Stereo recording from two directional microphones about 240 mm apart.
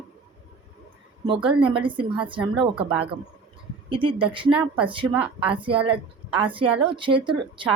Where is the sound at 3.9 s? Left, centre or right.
Centre.